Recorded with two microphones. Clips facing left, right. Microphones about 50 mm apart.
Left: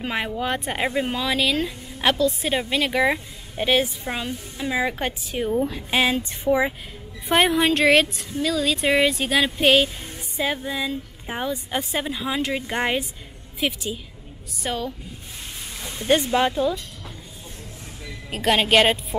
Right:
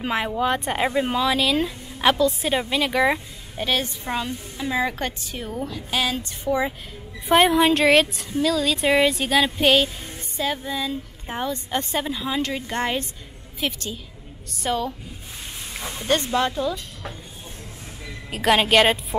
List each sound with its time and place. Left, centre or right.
0.0 s a woman's voice: centre; by 6.1 s left
6.4 s a woman's voice: centre
7.2 s a woman's voice: centre
16.1 s a woman's voice: centre
18.3 s a woman's voice: centre